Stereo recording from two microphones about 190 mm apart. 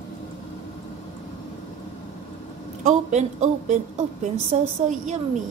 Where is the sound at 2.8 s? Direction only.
40° right (ahead or behind).